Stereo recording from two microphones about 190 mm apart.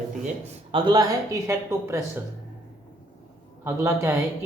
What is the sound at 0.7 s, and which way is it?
Speech, 25° right (ahead or behind).